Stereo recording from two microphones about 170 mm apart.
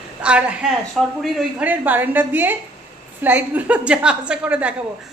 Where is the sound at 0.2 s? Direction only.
5° right (ahead or behind).